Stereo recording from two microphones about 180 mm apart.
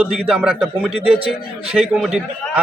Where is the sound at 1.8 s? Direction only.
5° left (ahead or behind).